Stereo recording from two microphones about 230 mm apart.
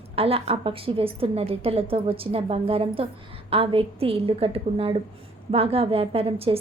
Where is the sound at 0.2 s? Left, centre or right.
Right.